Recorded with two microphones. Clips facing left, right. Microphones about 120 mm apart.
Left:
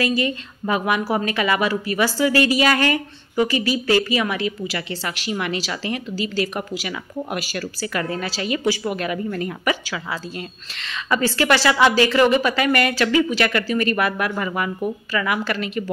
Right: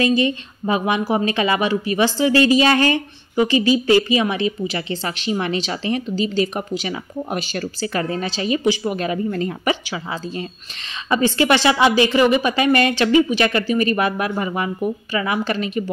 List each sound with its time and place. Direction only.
0.0 s speech: 25° right (ahead or behind)
11.1 s speech: 20° right (ahead or behind)